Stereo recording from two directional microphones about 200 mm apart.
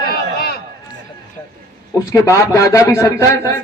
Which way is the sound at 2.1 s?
15° left (ahead or behind).